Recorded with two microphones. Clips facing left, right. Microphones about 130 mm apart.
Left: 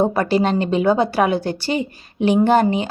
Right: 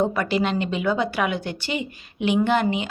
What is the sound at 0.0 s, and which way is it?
A woman's voice, 35° left (ahead or behind).